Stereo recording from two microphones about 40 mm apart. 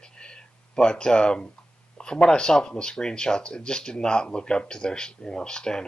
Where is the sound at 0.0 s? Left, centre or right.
Left.